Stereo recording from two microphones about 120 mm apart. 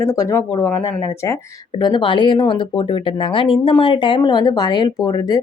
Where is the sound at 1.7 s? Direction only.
40° left (ahead or behind).